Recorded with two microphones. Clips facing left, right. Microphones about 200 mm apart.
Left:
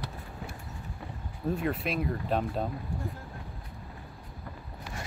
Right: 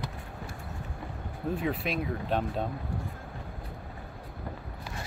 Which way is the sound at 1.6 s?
Centre (ahead or behind).